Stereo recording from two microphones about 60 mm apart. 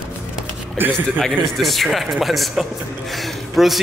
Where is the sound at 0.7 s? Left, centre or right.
Right.